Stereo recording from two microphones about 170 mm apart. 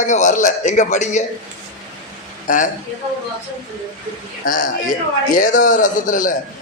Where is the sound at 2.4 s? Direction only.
50° left (ahead or behind).